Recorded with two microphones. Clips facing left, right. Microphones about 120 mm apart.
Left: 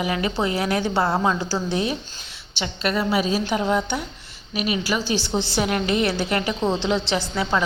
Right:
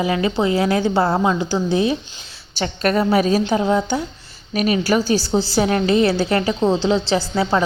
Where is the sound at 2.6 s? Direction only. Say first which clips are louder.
Right 5 dB; 45° right (ahead or behind).